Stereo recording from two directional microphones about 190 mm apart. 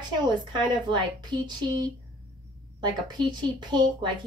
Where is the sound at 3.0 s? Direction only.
20° right (ahead or behind).